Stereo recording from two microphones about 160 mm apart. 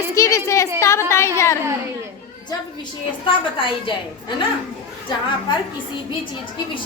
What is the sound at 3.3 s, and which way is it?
Speech, 30° left (ahead or behind).